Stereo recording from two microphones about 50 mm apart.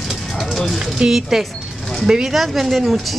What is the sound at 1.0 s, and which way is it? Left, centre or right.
A woman's voice, centre.